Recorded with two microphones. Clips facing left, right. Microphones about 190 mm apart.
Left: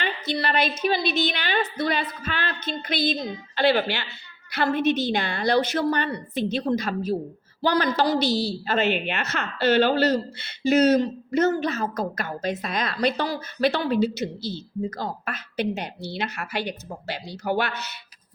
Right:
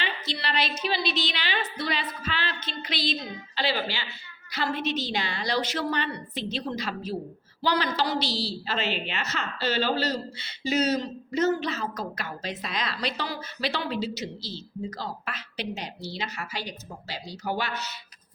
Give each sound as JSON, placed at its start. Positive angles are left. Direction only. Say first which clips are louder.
{"t": 0.0, "sound": "a woman's voice", "louder": "left 6 dB", "side_deg": 50}